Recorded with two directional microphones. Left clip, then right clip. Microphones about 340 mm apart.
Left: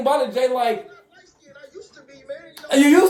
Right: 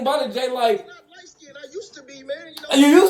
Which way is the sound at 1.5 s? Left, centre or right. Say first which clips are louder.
Right 6 dB; right.